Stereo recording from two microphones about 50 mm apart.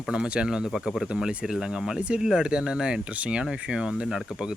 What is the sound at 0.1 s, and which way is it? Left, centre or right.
Speech, centre.